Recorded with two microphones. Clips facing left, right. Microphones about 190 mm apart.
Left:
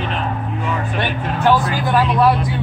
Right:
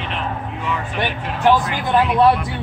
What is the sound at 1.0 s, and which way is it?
Speech, 20° right (ahead or behind).